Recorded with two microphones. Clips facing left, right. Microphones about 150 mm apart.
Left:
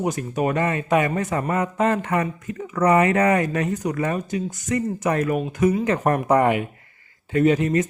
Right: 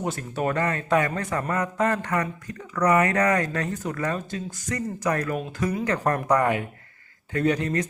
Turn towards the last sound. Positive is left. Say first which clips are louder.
# left 5 dB
turn(degrees=20)  # may be behind; listen again after turning